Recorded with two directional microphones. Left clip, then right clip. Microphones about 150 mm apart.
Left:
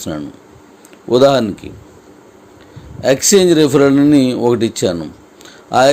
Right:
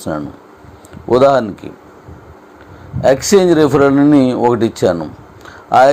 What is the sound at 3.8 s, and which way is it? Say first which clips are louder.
Speech: even; 45° left (ahead or behind).